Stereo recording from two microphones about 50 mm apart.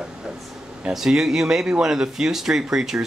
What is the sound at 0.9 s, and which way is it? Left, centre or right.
Speech, centre.